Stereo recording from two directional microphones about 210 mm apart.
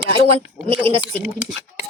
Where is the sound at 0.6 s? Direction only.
25° right (ahead or behind).